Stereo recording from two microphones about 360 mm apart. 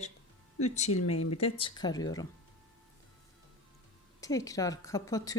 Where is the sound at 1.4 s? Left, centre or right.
Centre.